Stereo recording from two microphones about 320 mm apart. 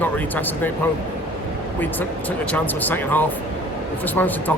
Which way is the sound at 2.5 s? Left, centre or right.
Centre.